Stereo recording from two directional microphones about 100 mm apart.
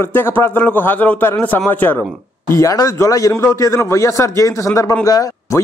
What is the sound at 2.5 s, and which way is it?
A man's voice, 35° left (ahead or behind).